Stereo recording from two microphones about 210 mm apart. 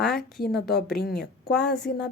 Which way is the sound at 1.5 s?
5° left (ahead or behind).